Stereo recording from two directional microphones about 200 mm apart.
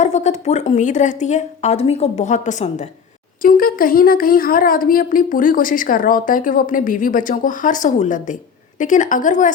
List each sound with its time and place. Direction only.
0.0 s a woman's voice: 35° left (ahead or behind)